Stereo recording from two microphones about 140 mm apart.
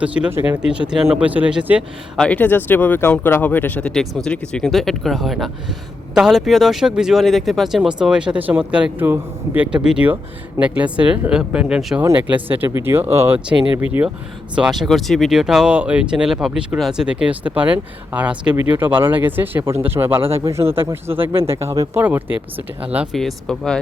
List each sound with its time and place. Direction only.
0.0 s speech: 10° right (ahead or behind)
2.1 s speech: 10° left (ahead or behind); by 14.1 s 15° right (ahead or behind)
14.5 s speech: 5° right (ahead or behind)
23.1 s speech: 5° left (ahead or behind)